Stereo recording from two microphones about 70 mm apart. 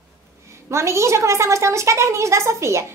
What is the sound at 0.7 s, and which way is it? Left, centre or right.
A woman's voice, right.